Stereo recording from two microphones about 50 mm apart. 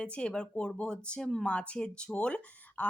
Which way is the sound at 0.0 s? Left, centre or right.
Left.